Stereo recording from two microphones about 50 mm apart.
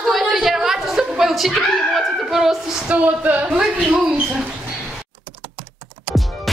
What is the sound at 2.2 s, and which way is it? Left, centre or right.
Speech, centre.